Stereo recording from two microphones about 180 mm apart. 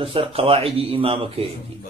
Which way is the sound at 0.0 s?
30° right (ahead or behind).